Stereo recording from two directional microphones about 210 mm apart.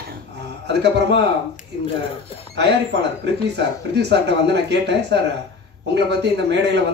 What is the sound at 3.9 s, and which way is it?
A man's voice, 55° right (ahead or behind).